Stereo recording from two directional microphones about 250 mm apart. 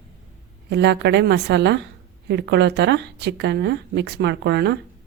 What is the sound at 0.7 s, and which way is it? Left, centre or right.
A woman's voice, right.